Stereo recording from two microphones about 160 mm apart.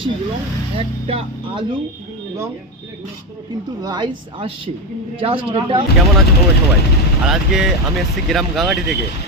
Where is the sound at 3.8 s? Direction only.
25° right (ahead or behind).